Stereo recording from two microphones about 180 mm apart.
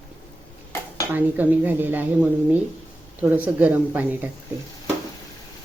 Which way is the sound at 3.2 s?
10° right (ahead or behind).